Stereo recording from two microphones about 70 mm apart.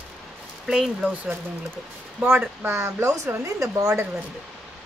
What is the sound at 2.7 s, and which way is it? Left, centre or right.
Speech, right.